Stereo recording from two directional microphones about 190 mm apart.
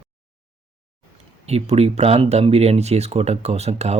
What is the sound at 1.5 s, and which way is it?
Speech, 35° right (ahead or behind).